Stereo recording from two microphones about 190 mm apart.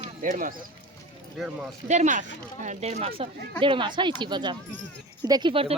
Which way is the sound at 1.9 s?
40° right (ahead or behind).